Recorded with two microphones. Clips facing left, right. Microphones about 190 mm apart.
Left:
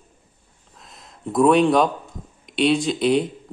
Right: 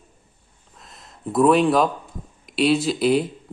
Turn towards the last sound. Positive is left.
turn(degrees=-5)  # may be behind; listen again after turning